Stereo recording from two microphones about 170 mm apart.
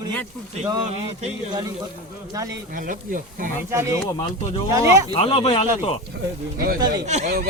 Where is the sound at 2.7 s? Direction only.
55° right (ahead or behind).